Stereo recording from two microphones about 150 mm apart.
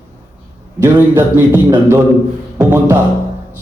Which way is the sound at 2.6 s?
15° right (ahead or behind).